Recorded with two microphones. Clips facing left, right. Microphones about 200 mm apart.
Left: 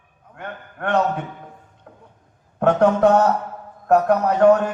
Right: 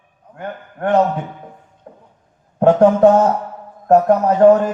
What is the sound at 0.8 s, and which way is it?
Speech, 30° right (ahead or behind).